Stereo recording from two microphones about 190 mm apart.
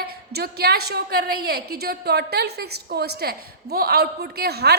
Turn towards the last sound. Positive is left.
turn(degrees=-55)  # may be behind; listen again after turning